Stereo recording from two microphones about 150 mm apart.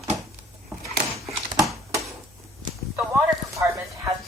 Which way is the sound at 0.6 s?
20° right (ahead or behind).